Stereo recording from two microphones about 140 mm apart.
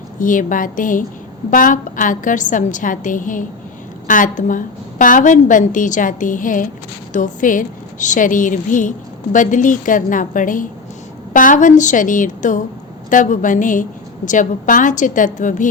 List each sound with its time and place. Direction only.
0.2 s a woman's voice: 70° left (ahead or behind)